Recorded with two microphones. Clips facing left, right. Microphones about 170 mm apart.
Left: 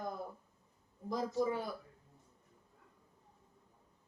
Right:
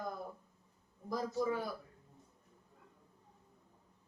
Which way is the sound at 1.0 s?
20° left (ahead or behind).